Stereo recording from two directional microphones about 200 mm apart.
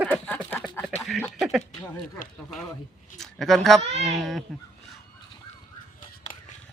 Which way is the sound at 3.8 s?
30° right (ahead or behind).